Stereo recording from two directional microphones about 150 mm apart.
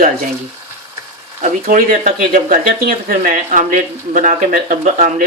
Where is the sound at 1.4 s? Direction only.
65° right (ahead or behind).